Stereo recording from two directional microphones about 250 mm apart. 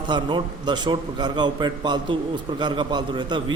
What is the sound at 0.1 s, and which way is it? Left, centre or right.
A man's voice, centre.